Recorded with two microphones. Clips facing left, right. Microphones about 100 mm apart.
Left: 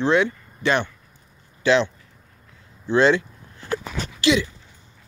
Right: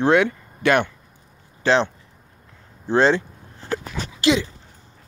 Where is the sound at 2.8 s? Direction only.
35° right (ahead or behind).